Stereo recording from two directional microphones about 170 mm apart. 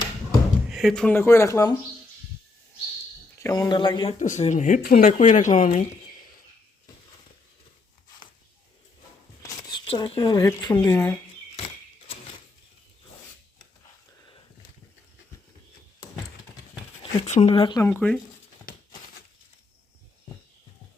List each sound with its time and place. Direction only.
0.3 s speech: centre (ahead or behind); by 1.8 s 20° left (ahead or behind)
3.3 s speech: 20° left (ahead or behind)
4.2 s speech: 45° left (ahead or behind)
4.8 s speech: 60° left (ahead or behind)
5.1 s speech: 50° left (ahead or behind)
9.4 s a sound: 20° left (ahead or behind)
10.4 s speech: 25° left (ahead or behind)
10.9 s speech: 10° left (ahead or behind)
11.5 s a sound: 35° left (ahead or behind)
17.0 s speech: 35° left (ahead or behind)
17.8 s speech: 10° left (ahead or behind)